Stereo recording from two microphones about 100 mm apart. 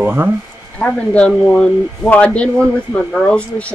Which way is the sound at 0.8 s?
10° left (ahead or behind).